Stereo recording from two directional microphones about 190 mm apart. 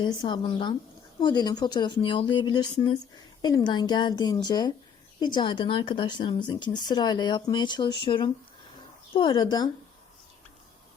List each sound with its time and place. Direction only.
0.0 s speech: 25° left (ahead or behind)